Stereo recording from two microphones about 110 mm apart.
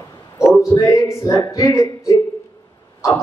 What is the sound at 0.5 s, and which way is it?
A man's voice, 30° left (ahead or behind).